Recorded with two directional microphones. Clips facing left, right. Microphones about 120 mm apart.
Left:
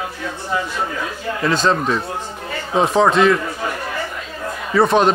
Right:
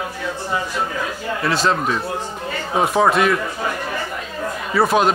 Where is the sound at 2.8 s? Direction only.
5° right (ahead or behind).